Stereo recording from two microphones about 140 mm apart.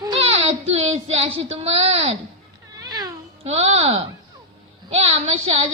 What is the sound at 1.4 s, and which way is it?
Child singing, 45° right (ahead or behind).